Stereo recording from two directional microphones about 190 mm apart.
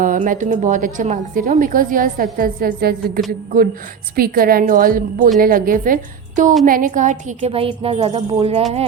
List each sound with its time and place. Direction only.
0.0 s a woman's voice: 45° right (ahead or behind)
4.1 s a woman's voice: 50° right (ahead or behind); by 8.6 s 30° right (ahead or behind)